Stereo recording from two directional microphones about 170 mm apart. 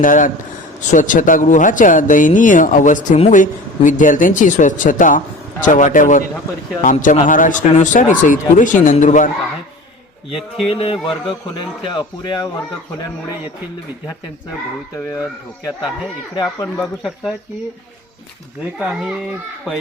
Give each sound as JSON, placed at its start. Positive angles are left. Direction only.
{"t": 0.0, "sound": "speech", "side_deg": 50}
{"t": 10.2, "sound": "speech", "side_deg": 35}
{"t": 16.3, "sound": "speech", "side_deg": 25}
{"t": 16.7, "sound": "speech", "side_deg": 0}
{"t": 18.8, "sound": "speech", "side_deg": -5}